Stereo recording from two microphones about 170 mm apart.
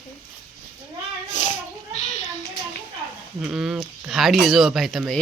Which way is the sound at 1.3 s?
45° left (ahead or behind).